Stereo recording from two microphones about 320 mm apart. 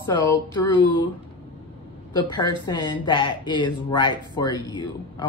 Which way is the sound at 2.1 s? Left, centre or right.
Centre.